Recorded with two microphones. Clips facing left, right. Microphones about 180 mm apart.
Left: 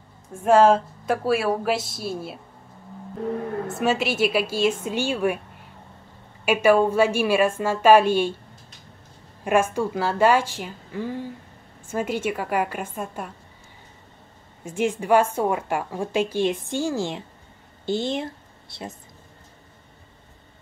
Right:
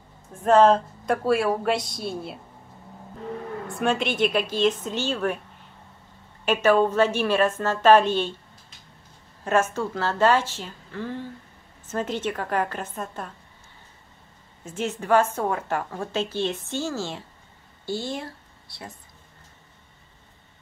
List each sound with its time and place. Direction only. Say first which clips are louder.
0.3 s a woman's voice: left 1 dB; 10° left (ahead or behind)
3.8 s a woman's voice: left 1 dB; 5° left (ahead or behind)
6.4 s a woman's voice: left 2 dB; 10° left (ahead or behind)
9.4 s a woman's voice: left 2 dB; 10° left (ahead or behind)
14.6 s a woman's voice: left 5 dB; 10° left (ahead or behind)